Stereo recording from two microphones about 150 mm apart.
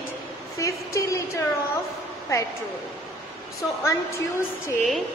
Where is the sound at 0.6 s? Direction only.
20° left (ahead or behind).